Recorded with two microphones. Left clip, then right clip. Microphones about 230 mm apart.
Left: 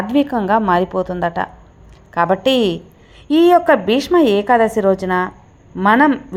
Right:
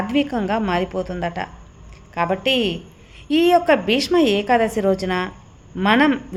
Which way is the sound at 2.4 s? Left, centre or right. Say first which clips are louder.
Left 4 dB; left.